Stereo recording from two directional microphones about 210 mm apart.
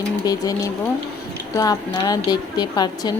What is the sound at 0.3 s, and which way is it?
A woman's voice, 15° left (ahead or behind).